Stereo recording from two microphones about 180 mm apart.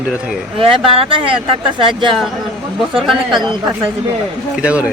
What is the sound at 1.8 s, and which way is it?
Speech, 25° right (ahead or behind).